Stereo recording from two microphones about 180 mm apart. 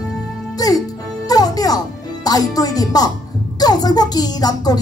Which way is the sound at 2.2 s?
20° left (ahead or behind).